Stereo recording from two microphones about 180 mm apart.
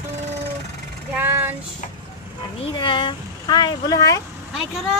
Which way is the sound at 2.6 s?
25° left (ahead or behind).